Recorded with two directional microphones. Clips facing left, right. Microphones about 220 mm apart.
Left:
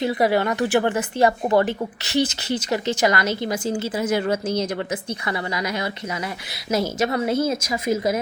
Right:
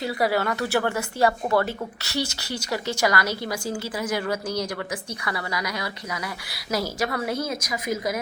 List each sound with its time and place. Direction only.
0.0 s speech: 20° left (ahead or behind)